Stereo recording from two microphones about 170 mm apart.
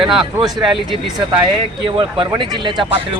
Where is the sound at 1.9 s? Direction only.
30° right (ahead or behind).